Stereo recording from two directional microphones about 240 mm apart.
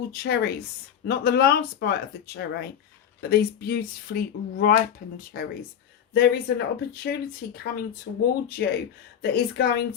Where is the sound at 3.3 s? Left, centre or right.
Left.